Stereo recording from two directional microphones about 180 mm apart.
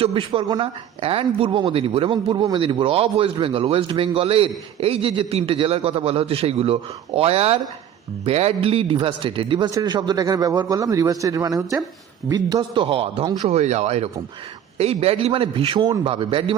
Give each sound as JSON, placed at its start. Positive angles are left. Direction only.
{"t": 0.0, "sound": "a man's voice", "side_deg": -30}
{"t": 12.5, "sound": "speech", "side_deg": -30}